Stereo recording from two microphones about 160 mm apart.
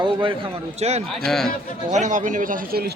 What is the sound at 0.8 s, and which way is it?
A man's voice, 40° right (ahead or behind).